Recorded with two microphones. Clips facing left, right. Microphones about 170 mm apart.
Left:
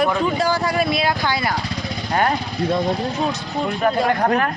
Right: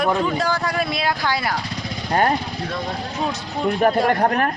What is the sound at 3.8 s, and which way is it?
Speech, 40° right (ahead or behind).